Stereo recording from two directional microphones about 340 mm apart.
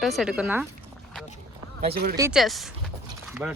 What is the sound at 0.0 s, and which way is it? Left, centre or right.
Speech, centre.